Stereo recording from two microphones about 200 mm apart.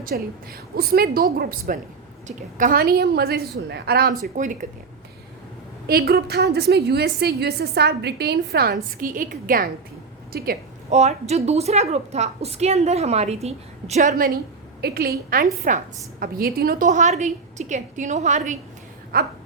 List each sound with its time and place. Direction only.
0.0 s a woman's voice: 50° right (ahead or behind)
4.2 s a woman's voice: 40° right (ahead or behind)
5.9 s a woman's voice: 50° right (ahead or behind)
10.9 s a woman's voice: 35° right (ahead or behind)
14.1 s a woman's voice: 50° right (ahead or behind)